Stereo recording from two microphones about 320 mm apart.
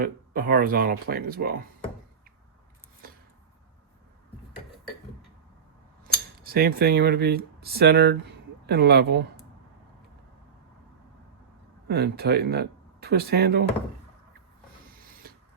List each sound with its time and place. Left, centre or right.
0.0 s speech: right
3.0 s a sound: right
6.4 s speech: right
11.9 s speech: right